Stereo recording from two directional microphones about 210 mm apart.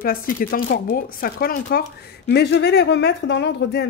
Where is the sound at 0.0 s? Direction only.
45° left (ahead or behind).